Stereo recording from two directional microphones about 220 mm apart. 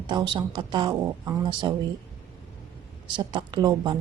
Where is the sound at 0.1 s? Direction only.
20° right (ahead or behind).